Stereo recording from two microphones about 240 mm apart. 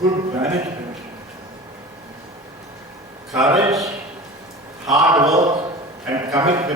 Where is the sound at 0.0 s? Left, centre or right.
Centre.